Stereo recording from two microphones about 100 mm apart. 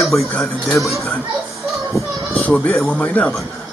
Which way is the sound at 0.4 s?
Centre (ahead or behind).